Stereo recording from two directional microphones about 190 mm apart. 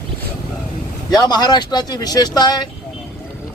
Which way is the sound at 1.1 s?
20° left (ahead or behind).